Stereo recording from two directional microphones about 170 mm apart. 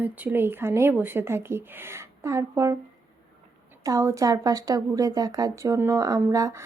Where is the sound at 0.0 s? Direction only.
10° right (ahead or behind).